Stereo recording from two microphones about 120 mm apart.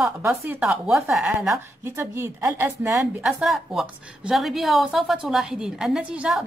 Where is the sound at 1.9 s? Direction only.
20° right (ahead or behind).